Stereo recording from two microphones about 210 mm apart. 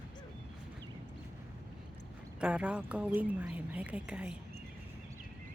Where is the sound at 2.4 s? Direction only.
5° right (ahead or behind).